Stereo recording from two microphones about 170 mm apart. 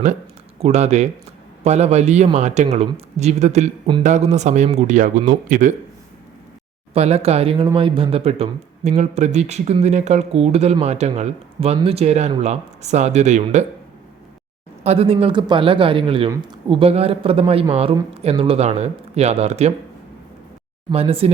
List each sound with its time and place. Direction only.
0.6 s speech: 40° right (ahead or behind)
6.9 s speech: 35° right (ahead or behind)
14.8 s speech: 35° right (ahead or behind)
20.9 s speech: 35° right (ahead or behind)